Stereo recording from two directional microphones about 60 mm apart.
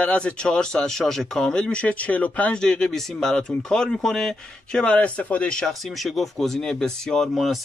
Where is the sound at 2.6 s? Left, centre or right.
Centre.